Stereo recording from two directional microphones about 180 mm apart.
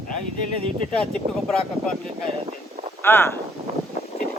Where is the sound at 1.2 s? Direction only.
35° right (ahead or behind).